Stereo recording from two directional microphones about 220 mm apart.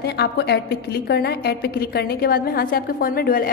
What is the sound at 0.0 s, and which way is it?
A woman's voice, 50° left (ahead or behind).